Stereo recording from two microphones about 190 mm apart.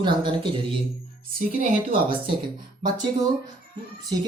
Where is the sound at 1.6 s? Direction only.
45° right (ahead or behind).